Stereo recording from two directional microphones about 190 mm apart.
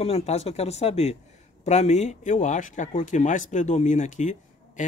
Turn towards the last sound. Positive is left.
turn(degrees=40)  # may be behind; listen again after turning